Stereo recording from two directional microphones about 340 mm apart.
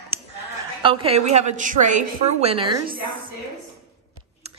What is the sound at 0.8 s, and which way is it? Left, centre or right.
A woman's voice, centre.